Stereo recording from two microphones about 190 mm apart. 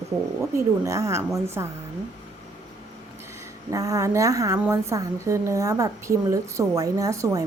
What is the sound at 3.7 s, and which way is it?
A woman's voice, 15° right (ahead or behind).